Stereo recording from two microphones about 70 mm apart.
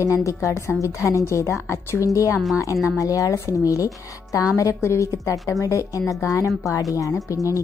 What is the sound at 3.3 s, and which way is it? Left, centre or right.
Speech, left.